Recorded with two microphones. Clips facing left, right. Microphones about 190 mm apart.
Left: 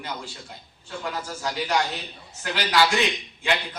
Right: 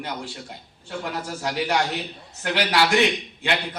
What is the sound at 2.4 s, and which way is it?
Speech, 70° right (ahead or behind).